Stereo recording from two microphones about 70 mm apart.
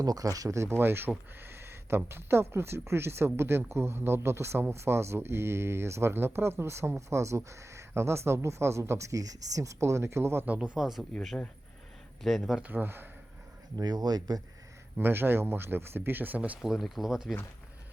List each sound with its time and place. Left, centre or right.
0.0 s speech: right
0.8 s speech: right
10.4 s speech: right
10.8 s speech: centre
12.2 s speech: centre
12.7 s speech: right
13.7 s speech: right
14.9 s speech: right
16.6 s speech: centre